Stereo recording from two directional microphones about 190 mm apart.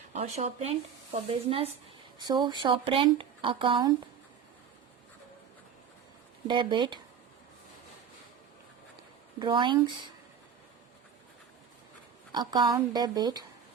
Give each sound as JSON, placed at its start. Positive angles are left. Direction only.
{"t": 0.1, "sound": "speech", "side_deg": -35}
{"t": 6.5, "sound": "speech", "side_deg": -25}
{"t": 9.4, "sound": "speech", "side_deg": -25}
{"t": 12.3, "sound": "speech", "side_deg": -20}